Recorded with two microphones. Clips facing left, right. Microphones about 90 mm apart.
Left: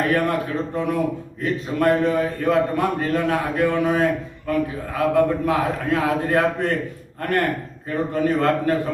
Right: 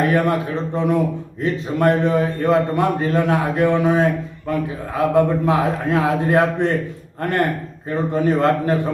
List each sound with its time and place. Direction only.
0.0 s a man's voice: 20° right (ahead or behind)
1.4 s a man's voice: 20° right (ahead or behind)